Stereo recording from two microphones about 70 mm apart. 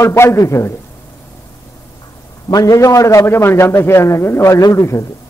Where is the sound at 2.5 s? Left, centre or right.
Left.